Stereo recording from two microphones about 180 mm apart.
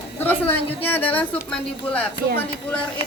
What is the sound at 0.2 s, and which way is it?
A woman's voice, 10° left (ahead or behind).